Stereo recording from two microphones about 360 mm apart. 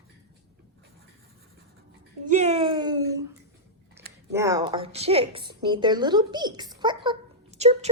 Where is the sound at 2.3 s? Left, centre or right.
Centre.